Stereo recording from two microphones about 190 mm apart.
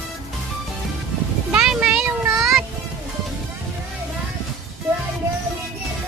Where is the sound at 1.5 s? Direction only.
5° right (ahead or behind).